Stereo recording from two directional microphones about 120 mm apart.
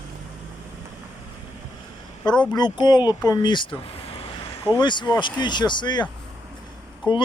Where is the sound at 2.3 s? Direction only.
35° left (ahead or behind).